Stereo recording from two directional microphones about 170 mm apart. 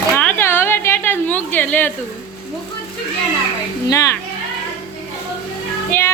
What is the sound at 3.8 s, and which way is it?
Speech, 20° left (ahead or behind).